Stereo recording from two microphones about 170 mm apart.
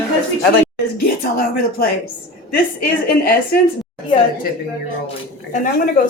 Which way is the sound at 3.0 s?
60° left (ahead or behind).